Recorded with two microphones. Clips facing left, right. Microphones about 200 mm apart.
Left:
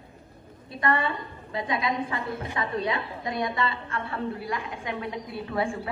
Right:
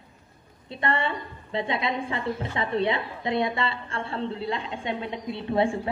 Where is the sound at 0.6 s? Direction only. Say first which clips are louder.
Left 1 dB; 25° right (ahead or behind).